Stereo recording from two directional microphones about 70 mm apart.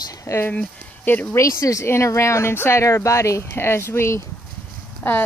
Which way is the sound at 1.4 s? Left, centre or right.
Left.